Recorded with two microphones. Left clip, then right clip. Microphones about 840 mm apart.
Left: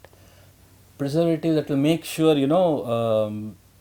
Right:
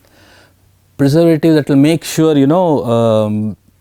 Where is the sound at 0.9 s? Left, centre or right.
Right.